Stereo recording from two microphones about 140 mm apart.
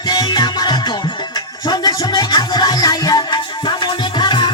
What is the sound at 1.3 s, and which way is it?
Music, 30° left (ahead or behind).